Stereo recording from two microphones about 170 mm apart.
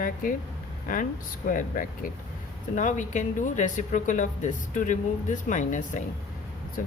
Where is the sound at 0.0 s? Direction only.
55° left (ahead or behind).